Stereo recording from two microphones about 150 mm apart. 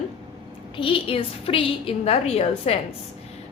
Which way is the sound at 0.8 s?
35° left (ahead or behind).